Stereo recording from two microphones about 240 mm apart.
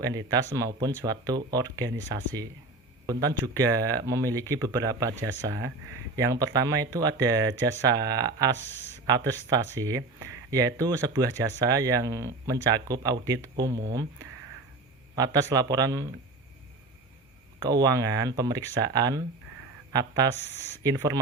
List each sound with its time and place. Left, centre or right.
0.0 s speech: centre
3.1 s speech: centre
15.1 s speech: centre
17.6 s speech: centre